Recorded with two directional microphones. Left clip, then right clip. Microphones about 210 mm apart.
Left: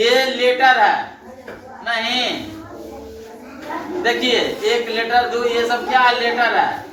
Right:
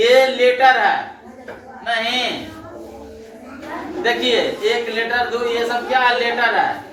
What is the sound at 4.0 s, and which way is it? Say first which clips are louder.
A man's voice: even; 10° right (ahead or behind).